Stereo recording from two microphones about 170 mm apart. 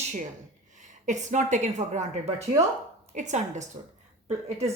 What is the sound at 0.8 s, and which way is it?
A woman's voice, 45° right (ahead or behind).